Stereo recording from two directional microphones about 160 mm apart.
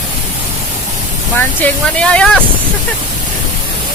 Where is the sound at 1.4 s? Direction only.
10° left (ahead or behind).